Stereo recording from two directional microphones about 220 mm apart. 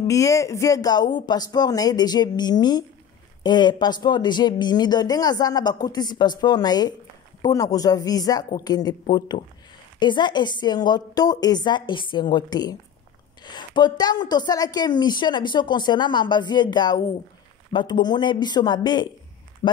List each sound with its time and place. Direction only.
0.0 s speech: 15° left (ahead or behind)